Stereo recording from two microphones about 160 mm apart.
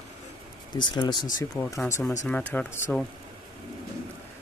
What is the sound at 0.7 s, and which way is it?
Speech, 25° left (ahead or behind).